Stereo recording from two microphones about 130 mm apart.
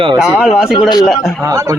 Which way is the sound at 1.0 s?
Centre (ahead or behind).